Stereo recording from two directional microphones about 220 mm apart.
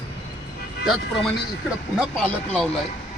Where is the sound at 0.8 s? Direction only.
Centre (ahead or behind).